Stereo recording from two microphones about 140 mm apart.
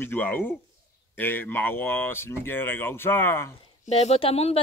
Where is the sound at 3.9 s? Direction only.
50° left (ahead or behind).